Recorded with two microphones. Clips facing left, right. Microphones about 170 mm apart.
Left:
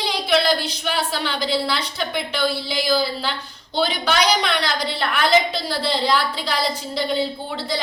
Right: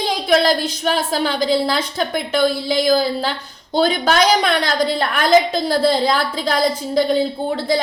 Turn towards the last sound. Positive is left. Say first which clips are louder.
# right 8 dB
turn(degrees=-50)  # may be behind; listen again after turning